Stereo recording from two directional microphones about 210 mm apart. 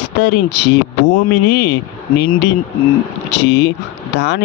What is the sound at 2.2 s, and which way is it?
Speech, 45° left (ahead or behind).